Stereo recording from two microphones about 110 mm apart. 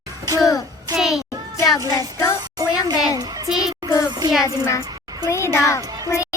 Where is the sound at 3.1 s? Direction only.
35° right (ahead or behind).